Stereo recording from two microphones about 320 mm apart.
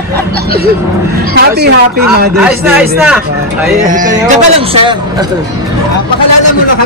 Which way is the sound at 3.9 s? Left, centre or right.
Right.